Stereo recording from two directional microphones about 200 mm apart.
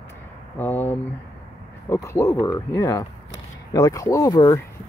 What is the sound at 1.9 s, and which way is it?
Speech, 15° left (ahead or behind).